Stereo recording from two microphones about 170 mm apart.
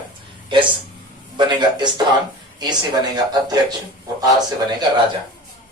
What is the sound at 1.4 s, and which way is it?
Speech, 25° right (ahead or behind).